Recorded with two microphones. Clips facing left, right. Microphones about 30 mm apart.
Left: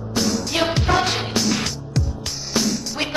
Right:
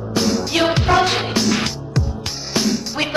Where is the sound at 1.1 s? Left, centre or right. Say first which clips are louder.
Right 3 dB; centre.